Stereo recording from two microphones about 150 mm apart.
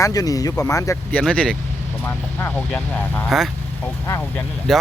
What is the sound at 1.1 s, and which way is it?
Speech, 5° left (ahead or behind).